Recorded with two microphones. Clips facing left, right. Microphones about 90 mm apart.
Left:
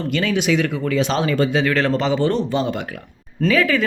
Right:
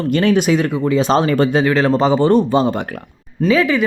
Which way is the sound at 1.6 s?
20° right (ahead or behind).